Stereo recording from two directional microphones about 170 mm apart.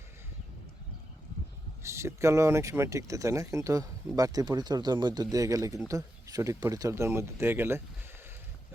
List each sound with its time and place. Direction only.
1.8 s speech: 15° right (ahead or behind)